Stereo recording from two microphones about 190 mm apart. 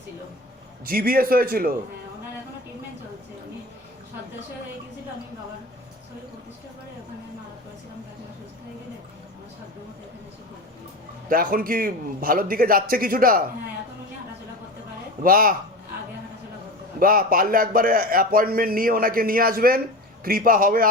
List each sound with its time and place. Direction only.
0.9 s a man's voice: 50° right (ahead or behind)
11.3 s a man's voice: 50° right (ahead or behind)
15.2 s a man's voice: 50° right (ahead or behind)
17.0 s a man's voice: 50° right (ahead or behind)